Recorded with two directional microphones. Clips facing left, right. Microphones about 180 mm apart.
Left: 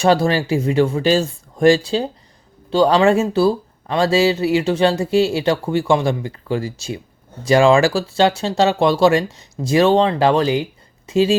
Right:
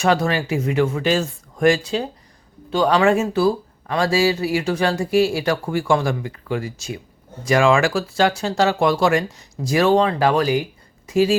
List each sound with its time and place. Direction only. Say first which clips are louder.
0.0 s speech: left 3 dB; 30° left (ahead or behind)